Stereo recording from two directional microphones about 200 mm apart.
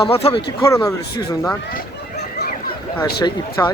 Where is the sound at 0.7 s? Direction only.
15° left (ahead or behind).